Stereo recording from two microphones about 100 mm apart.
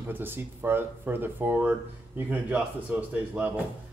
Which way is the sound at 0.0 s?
20° right (ahead or behind).